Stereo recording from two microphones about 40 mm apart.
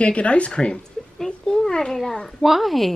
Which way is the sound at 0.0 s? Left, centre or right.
Left.